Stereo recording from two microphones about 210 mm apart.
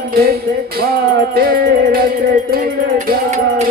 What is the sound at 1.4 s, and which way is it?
Music, 45° right (ahead or behind).